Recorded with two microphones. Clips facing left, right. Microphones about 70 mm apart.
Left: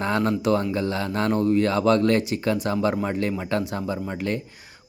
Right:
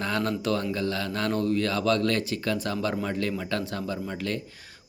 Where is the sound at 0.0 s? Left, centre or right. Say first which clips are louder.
Left 5 dB; left.